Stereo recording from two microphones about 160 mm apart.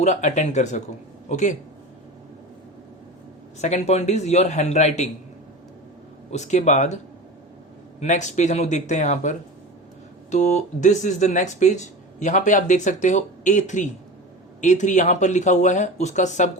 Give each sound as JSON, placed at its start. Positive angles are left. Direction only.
{"t": 0.0, "sound": "speech", "side_deg": 50}
{"t": 3.6, "sound": "speech", "side_deg": 45}
{"t": 6.3, "sound": "speech", "side_deg": 45}
{"t": 10.3, "sound": "speech", "side_deg": 50}